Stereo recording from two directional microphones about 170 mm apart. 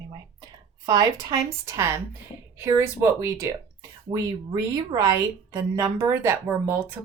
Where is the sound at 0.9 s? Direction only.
20° right (ahead or behind).